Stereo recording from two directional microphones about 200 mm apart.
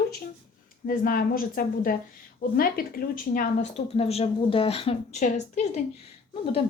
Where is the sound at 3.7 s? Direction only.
30° left (ahead or behind).